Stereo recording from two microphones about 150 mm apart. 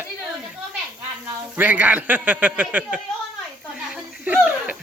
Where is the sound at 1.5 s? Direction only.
10° right (ahead or behind).